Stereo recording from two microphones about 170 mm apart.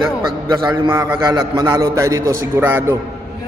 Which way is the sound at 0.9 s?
15° right (ahead or behind).